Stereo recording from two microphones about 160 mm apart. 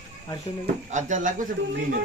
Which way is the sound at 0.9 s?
50° right (ahead or behind).